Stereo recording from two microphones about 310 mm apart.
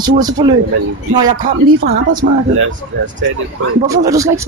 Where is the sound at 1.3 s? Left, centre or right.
Right.